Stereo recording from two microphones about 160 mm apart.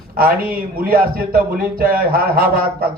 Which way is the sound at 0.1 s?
65° right (ahead or behind).